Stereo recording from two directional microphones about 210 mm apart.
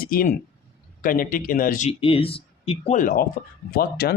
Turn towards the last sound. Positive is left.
turn(degrees=50)  # may be behind; listen again after turning